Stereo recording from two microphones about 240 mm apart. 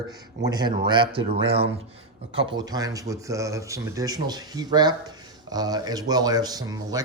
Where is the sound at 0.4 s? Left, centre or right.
Centre.